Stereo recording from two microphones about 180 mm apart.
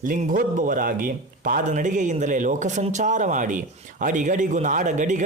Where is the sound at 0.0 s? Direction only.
50° right (ahead or behind).